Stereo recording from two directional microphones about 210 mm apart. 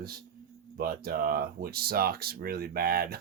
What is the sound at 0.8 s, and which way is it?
Speech, 45° right (ahead or behind).